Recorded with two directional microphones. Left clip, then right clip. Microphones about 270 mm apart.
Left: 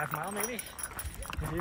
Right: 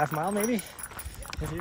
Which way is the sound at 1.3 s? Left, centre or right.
Centre.